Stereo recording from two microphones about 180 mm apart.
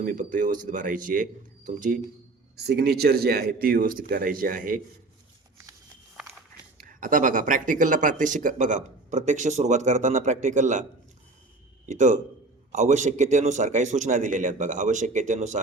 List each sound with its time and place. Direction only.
0.0 s speech: 50° right (ahead or behind)
2.6 s a man's voice: 65° right (ahead or behind)
6.7 s speech: 50° right (ahead or behind)
11.9 s a man's voice: 40° right (ahead or behind)